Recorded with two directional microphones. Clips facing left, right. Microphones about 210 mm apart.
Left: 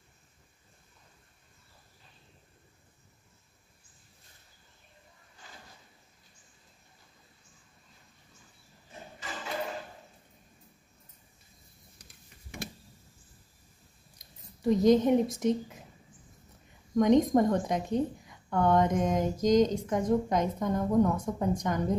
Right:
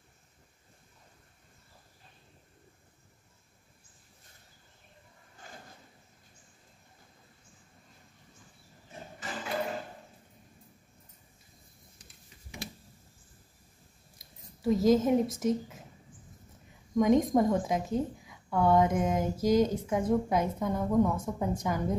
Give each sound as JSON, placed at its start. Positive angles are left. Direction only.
{"t": 5.4, "sound": "a sound", "side_deg": -50}
{"t": 14.1, "sound": "speech", "side_deg": -5}
{"t": 16.9, "sound": "a woman's voice", "side_deg": -5}